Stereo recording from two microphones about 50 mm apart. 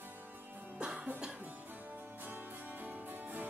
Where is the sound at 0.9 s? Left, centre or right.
Right.